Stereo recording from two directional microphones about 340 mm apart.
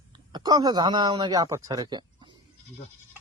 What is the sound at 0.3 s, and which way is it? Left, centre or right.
Speech, centre.